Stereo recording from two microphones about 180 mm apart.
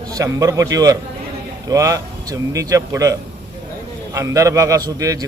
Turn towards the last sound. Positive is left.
turn(degrees=-20)  # may be behind; listen again after turning